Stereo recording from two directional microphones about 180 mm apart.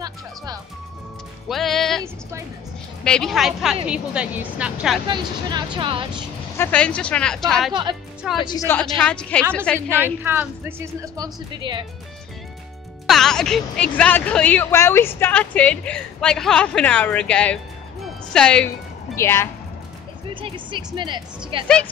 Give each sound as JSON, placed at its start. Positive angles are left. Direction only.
{"t": 1.5, "sound": "music", "side_deg": 0}
{"t": 3.0, "sound": "a woman's voice", "side_deg": 5}
{"t": 5.0, "sound": "speech", "side_deg": -25}
{"t": 6.6, "sound": "speech", "side_deg": 5}
{"t": 8.4, "sound": "a woman's voice", "side_deg": 25}
{"t": 8.6, "sound": "speech", "side_deg": 5}
{"t": 10.2, "sound": "speech", "side_deg": -10}
{"t": 13.0, "sound": "a woman's voice", "side_deg": 0}
{"t": 20.3, "sound": "a woman's voice", "side_deg": -30}